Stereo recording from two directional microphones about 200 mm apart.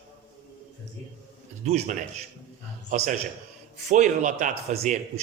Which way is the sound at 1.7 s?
30° right (ahead or behind).